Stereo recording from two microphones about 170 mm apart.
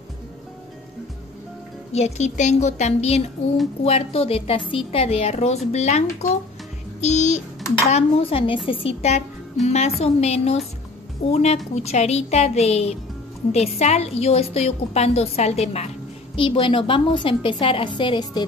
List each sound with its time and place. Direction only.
1.9 s a woman's voice: 40° left (ahead or behind)